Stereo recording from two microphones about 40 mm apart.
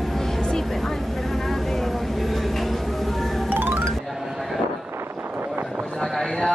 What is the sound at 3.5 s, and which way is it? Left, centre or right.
Music, right.